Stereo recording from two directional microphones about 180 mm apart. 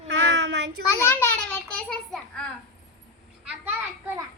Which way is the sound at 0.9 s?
10° left (ahead or behind).